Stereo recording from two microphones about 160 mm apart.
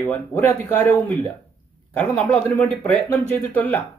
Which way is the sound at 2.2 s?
5° left (ahead or behind).